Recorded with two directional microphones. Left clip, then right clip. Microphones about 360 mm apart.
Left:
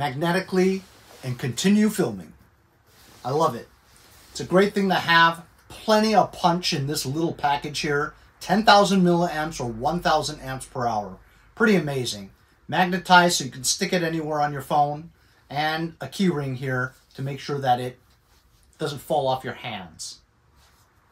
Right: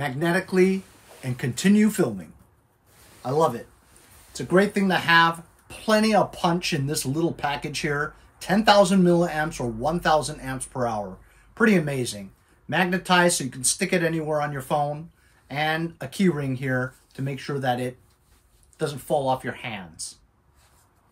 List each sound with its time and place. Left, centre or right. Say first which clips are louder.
0.2 s speech: right 3 dB; centre
3.2 s a sound: right 1 dB; centre
4.3 s speech: left 1 dB; centre